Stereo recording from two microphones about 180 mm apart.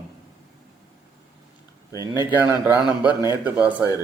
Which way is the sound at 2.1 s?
10° right (ahead or behind).